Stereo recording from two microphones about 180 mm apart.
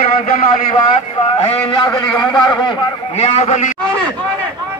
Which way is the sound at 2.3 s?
25° left (ahead or behind).